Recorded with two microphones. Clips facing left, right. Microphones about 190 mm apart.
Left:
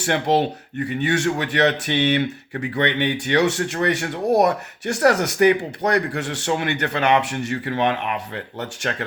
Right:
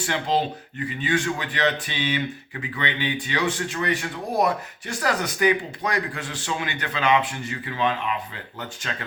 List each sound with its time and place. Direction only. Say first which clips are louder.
0.0 s speech: left 5 dB; 70° left (ahead or behind)